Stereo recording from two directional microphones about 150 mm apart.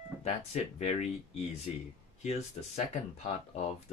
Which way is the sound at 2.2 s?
45° left (ahead or behind).